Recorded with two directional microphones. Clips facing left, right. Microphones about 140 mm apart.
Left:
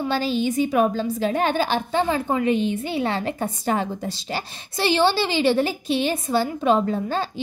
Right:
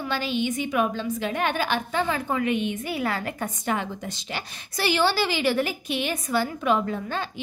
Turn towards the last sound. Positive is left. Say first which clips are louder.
# left 5 dB
turn(degrees=35)  # may be behind; listen again after turning